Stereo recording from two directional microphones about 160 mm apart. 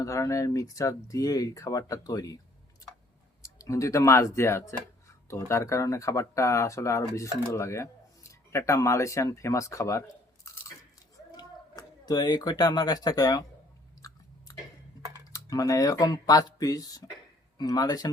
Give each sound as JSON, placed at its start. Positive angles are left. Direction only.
{"t": 0.0, "sound": "speech", "side_deg": 20}
{"t": 3.4, "sound": "speech", "side_deg": 20}
{"t": 11.3, "sound": "speech", "side_deg": 25}
{"t": 14.0, "sound": "chewing", "side_deg": 20}
{"t": 15.3, "sound": "speech", "side_deg": 20}